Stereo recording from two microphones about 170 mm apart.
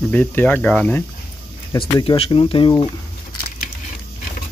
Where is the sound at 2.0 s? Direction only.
30° left (ahead or behind).